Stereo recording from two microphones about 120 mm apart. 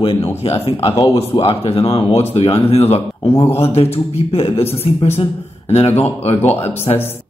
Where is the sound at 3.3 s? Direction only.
25° left (ahead or behind).